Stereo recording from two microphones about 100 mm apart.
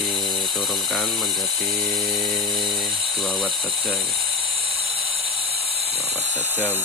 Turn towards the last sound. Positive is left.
turn(degrees=-20)  # may be behind; listen again after turning